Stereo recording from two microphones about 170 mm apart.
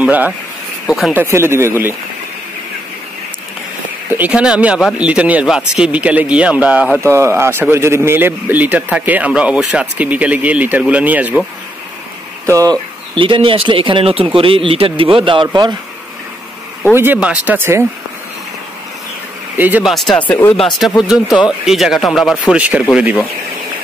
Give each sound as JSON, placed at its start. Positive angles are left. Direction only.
{"t": 0.0, "sound": "speech", "side_deg": -10}
{"t": 1.1, "sound": "speech", "side_deg": -15}
{"t": 4.1, "sound": "speech", "side_deg": -10}
{"t": 12.4, "sound": "speech", "side_deg": -20}
{"t": 13.1, "sound": "speech", "side_deg": -30}
{"t": 16.9, "sound": "speech", "side_deg": -10}
{"t": 19.5, "sound": "speech", "side_deg": -10}